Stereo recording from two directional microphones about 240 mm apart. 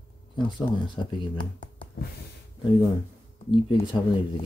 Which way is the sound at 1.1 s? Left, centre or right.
Centre.